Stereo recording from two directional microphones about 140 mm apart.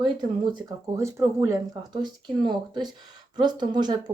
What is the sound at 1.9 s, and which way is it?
Speech, 35° right (ahead or behind).